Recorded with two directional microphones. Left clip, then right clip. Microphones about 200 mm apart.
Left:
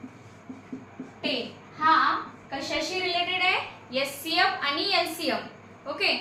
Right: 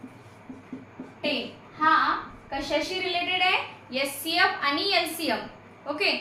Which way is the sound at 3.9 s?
10° right (ahead or behind).